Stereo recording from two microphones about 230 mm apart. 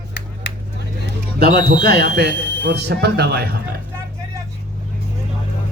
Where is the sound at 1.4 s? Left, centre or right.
Right.